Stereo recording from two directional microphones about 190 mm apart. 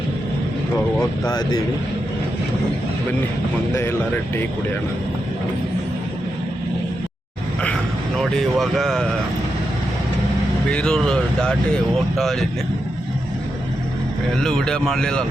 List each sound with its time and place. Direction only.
1.2 s speech: 20° left (ahead or behind)
8.2 s speech: centre (ahead or behind)
10.7 s speech: 5° left (ahead or behind)
14.4 s speech: 5° left (ahead or behind)